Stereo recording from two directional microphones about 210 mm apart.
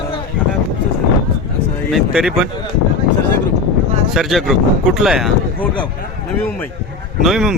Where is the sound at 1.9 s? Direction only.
5° right (ahead or behind).